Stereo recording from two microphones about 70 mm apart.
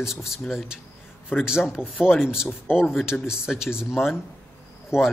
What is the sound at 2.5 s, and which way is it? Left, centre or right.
Speech, left.